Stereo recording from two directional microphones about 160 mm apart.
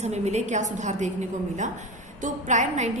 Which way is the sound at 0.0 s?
45° right (ahead or behind).